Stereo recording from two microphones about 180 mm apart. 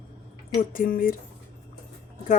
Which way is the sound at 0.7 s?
50° left (ahead or behind).